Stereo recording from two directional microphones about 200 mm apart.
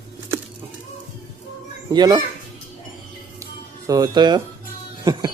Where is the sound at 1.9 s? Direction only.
20° right (ahead or behind).